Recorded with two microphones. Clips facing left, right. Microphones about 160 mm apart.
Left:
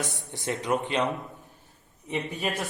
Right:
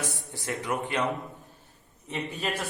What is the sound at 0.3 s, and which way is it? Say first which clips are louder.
A man's voice: left 5 dB; 20° left (ahead or behind).